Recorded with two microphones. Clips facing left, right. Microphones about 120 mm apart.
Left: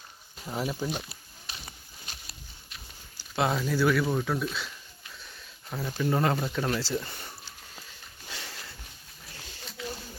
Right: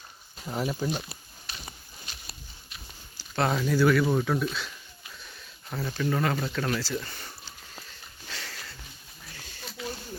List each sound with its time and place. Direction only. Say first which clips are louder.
0.4 s speech: right 2 dB; centre (ahead or behind)
2.1 s a sound: left 1 dB; 40° left (ahead or behind)
3.2 s speech: right 1 dB; 5° left (ahead or behind)
5.9 s speech: left 1 dB; 15° left (ahead or behind)
8.3 s sniff: right 1 dB; 20° left (ahead or behind)